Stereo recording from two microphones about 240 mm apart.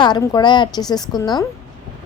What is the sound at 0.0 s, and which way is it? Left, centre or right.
A woman's voice, centre.